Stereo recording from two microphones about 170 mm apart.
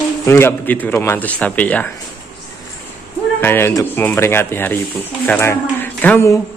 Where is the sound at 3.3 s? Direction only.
10° left (ahead or behind).